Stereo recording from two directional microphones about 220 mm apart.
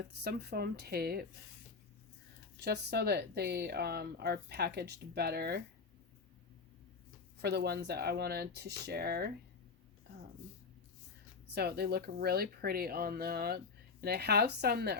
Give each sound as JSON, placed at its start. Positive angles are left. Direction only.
{"t": 0.2, "sound": "speech", "side_deg": -45}
{"t": 2.6, "sound": "speech", "side_deg": -50}
{"t": 7.3, "sound": "speech", "side_deg": -50}
{"t": 11.5, "sound": "speech", "side_deg": -45}